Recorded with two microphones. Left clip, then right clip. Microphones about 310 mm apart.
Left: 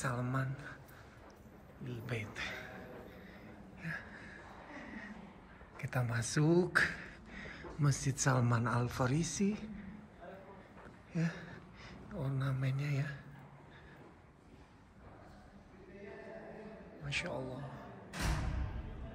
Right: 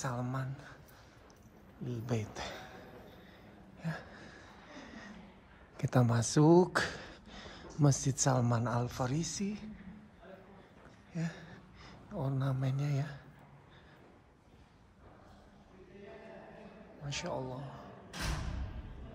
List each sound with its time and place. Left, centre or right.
0.0 s speech: centre
1.9 s speech: centre
3.8 s a sound: centre
5.8 s speech: centre
11.1 s speech: centre
17.0 s speech: centre